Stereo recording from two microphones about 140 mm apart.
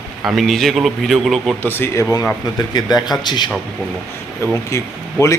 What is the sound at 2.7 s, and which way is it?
Speech, 30° left (ahead or behind).